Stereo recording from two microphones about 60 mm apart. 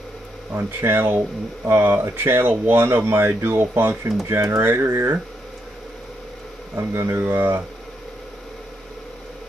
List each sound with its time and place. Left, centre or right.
0.6 s speech: right
6.7 s speech: right